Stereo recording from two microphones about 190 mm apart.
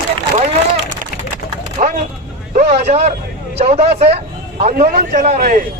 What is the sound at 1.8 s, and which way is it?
Vehicle, 40° right (ahead or behind).